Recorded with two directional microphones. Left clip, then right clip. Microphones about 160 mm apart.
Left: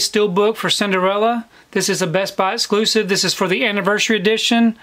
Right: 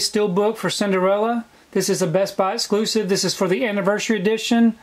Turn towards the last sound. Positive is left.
turn(degrees=25)  # may be behind; listen again after turning